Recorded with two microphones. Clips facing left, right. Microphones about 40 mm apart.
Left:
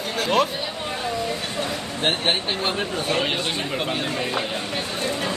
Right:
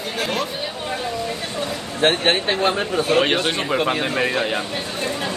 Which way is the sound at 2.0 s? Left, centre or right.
Right.